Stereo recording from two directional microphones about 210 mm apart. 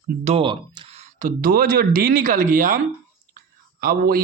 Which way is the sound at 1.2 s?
40° right (ahead or behind).